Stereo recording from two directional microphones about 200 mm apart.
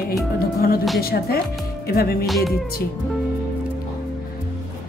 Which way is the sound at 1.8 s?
50° left (ahead or behind).